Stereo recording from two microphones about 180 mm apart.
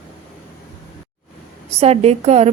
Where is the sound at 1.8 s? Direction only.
35° right (ahead or behind).